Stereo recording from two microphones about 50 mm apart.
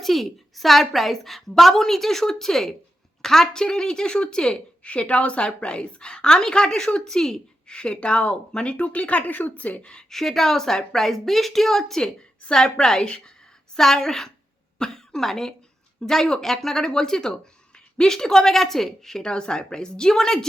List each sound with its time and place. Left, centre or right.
0.0 s a woman's voice: centre; by 9.9 s left
9.9 s a woman's voice: centre